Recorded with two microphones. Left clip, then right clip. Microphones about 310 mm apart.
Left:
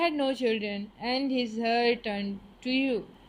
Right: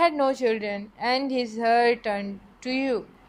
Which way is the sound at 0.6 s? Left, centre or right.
Right.